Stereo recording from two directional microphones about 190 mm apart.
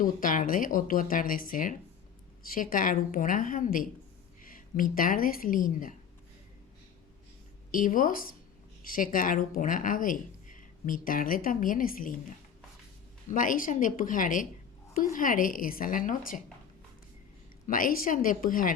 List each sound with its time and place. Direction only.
0.0 s speech: 45° left (ahead or behind)
7.7 s a woman's voice: 45° left (ahead or behind)
13.3 s speech: 45° left (ahead or behind)
17.7 s speech: 45° left (ahead or behind)